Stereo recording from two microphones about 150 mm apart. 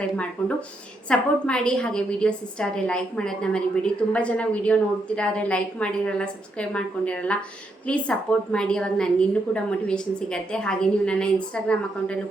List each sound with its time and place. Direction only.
0.0 s a woman's voice: 10° left (ahead or behind)